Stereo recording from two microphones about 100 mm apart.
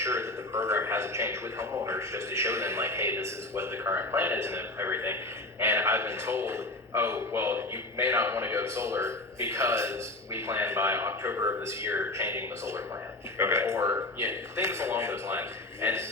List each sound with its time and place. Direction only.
0.0 s a man's voice: 25° right (ahead or behind)